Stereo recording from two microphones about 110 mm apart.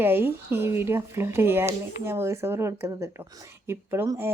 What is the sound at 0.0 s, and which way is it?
Speech, 20° right (ahead or behind).